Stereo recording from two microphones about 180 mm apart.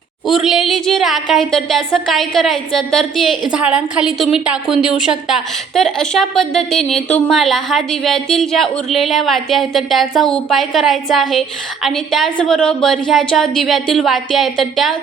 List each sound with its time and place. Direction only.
0.3 s a woman's voice: centre (ahead or behind)